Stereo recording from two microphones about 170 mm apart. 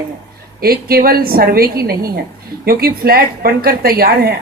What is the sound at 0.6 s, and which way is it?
A woman's voice, 60° right (ahead or behind).